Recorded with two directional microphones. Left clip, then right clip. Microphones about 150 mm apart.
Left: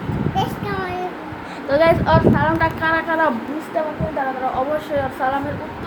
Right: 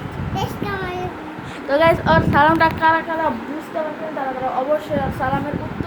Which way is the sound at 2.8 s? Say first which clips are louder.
Right 4 dB; 25° right (ahead or behind).